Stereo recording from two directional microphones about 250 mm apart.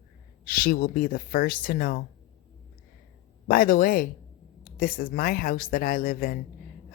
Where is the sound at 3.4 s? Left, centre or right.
Left.